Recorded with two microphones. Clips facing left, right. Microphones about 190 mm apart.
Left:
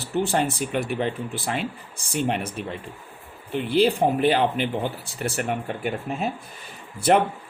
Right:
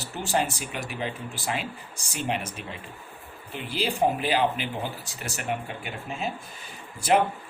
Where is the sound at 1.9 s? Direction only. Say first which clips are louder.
Left 5 dB; 55° left (ahead or behind).